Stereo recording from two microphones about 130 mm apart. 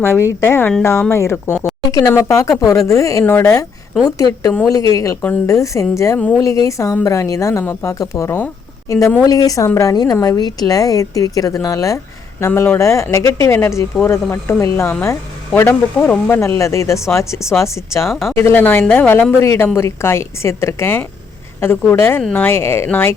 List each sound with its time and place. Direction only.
0.0 s a woman's voice: 20° left (ahead or behind)
6.1 s speech: 10° left (ahead or behind)
6.4 s a woman's voice: 25° left (ahead or behind)